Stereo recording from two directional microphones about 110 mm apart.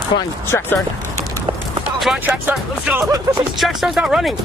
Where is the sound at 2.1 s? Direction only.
10° right (ahead or behind).